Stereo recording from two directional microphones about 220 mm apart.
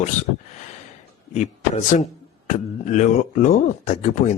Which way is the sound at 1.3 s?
30° left (ahead or behind).